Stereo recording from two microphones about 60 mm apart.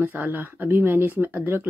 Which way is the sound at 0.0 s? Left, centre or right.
Right.